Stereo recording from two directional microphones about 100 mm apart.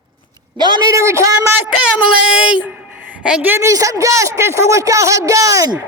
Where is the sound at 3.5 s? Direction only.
30° right (ahead or behind).